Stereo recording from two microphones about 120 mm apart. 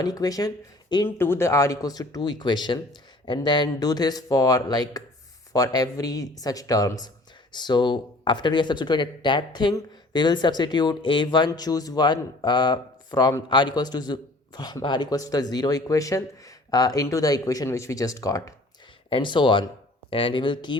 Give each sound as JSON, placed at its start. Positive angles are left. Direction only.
{"t": 0.0, "sound": "speech", "side_deg": 30}
{"t": 1.0, "sound": "speech", "side_deg": 20}
{"t": 19.1, "sound": "speech", "side_deg": 40}